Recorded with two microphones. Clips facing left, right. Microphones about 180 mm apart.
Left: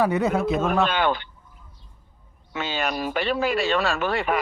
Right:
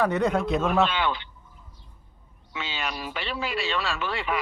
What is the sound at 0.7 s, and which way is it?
Speech, 50° left (ahead or behind).